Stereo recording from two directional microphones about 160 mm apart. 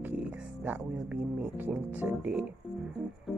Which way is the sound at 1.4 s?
10° right (ahead or behind).